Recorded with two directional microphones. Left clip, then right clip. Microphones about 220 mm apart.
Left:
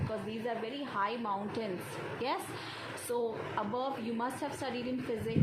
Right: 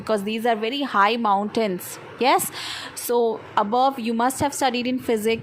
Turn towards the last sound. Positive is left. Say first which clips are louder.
# right 14 dB
turn(degrees=-45)  # may be behind; listen again after turning